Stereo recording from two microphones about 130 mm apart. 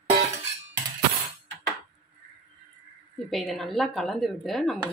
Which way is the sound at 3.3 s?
Centre (ahead or behind).